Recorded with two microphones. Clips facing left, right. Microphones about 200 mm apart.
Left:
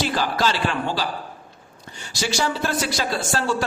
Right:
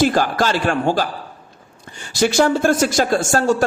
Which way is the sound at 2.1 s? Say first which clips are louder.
Right 9 dB; 55° right (ahead or behind).